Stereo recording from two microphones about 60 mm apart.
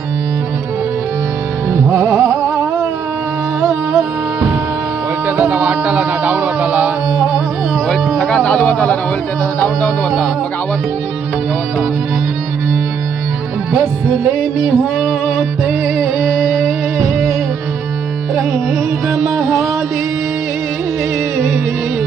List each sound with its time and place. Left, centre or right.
1.7 s music: right
5.2 s music: right
14.1 s music: right
19.0 s music: right